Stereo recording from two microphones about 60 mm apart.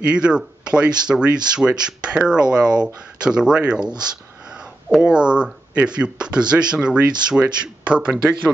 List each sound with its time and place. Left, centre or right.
0.1 s speech: centre